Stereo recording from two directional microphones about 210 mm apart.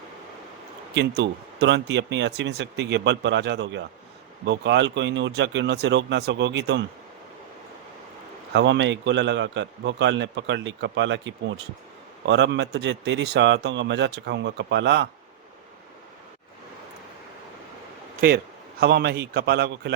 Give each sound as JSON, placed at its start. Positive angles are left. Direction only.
{"t": 0.9, "sound": "a man's voice", "side_deg": -55}
{"t": 8.5, "sound": "a man's voice", "side_deg": -60}
{"t": 18.8, "sound": "a man's voice", "side_deg": -50}